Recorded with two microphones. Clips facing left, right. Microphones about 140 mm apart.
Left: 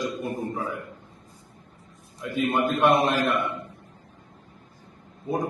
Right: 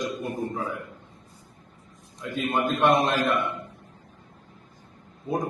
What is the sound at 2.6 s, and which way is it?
Speech, 15° left (ahead or behind).